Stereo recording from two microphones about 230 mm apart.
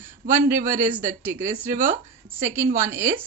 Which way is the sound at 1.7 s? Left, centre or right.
Right.